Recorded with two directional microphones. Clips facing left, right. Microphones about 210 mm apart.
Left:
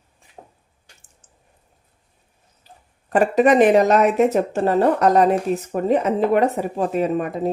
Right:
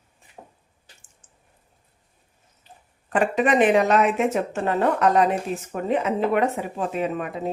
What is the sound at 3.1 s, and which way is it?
Speech, 40° left (ahead or behind).